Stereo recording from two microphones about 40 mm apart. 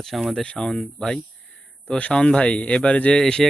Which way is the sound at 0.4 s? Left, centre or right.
Left.